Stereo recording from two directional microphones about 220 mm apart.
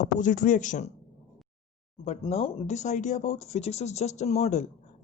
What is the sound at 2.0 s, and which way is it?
Speech, 30° left (ahead or behind).